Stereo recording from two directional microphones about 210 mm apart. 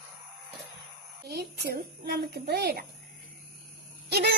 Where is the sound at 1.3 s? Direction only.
50° right (ahead or behind).